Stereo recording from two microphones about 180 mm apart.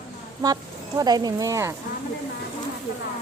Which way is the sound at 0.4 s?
20° right (ahead or behind).